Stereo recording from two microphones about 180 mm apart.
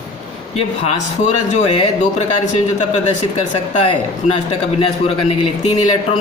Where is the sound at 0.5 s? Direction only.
35° left (ahead or behind).